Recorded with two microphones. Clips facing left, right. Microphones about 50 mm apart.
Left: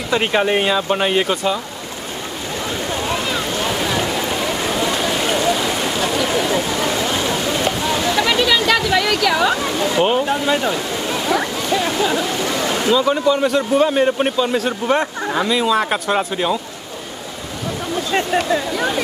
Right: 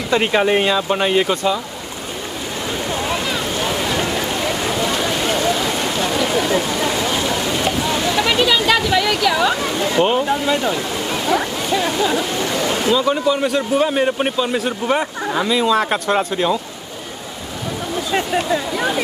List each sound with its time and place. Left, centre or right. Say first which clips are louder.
0.1 s a man's voice: right 1 dB; centre
3.8 s a sound: even; centre
8.3 s waterfall: right 1 dB; right
9.9 s a man's voice: right 1 dB; centre
11.2 s a sound: right 1 dB; centre
12.8 s a man's voice: left 2 dB; centre
18.1 s a man's voice: left 1 dB; centre